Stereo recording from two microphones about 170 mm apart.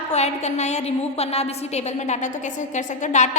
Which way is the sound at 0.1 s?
40° left (ahead or behind).